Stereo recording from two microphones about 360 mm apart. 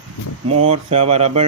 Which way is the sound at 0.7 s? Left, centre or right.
Centre.